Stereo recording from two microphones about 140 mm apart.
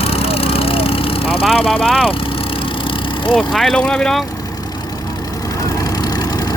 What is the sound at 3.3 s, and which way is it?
Speech, centre (ahead or behind).